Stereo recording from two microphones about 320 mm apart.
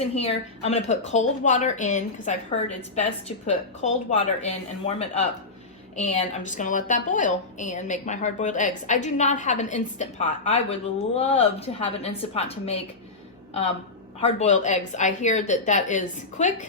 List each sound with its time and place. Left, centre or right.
0.0 s a woman's voice: centre
6.1 s a woman's voice: left
14.2 s a woman's voice: left